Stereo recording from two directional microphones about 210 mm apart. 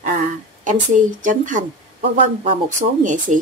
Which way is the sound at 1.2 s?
35° right (ahead or behind).